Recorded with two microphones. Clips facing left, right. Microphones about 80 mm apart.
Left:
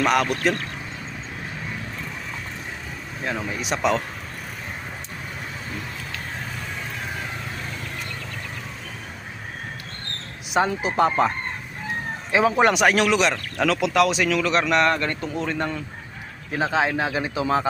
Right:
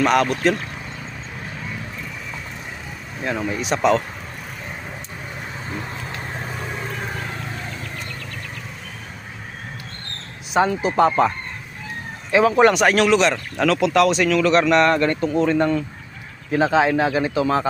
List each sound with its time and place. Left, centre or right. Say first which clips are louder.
0.0 s speech: right 3 dB; centre
3.2 s speech: right 4 dB; centre
5.7 s vehicle: right 3 dB; right
6.8 s vehicle: right 3 dB; centre
10.5 s speech: right 3 dB; centre
12.3 s speech: right 4 dB; centre